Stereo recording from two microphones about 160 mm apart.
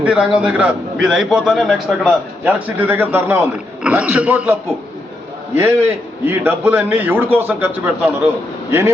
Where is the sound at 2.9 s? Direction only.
15° right (ahead or behind).